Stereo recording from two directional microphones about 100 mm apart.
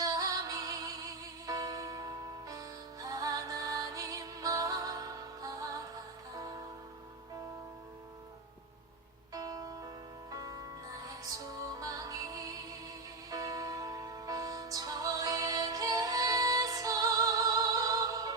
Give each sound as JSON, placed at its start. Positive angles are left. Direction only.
{"t": 0.0, "sound": "music", "side_deg": -35}
{"t": 9.3, "sound": "music", "side_deg": -40}
{"t": 11.8, "sound": "music", "side_deg": -35}